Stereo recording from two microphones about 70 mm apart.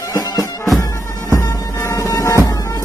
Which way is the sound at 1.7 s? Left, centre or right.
Left.